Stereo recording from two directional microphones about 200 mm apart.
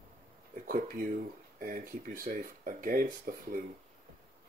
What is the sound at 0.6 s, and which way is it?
Speech, 45° right (ahead or behind).